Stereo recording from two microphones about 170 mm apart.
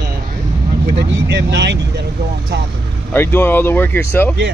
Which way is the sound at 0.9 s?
90° right.